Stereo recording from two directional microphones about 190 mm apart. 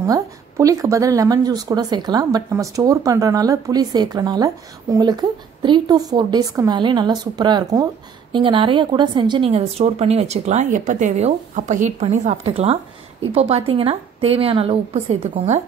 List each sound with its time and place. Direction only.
0.0 s a woman's voice: 15° right (ahead or behind); by 15.6 s 35° right (ahead or behind)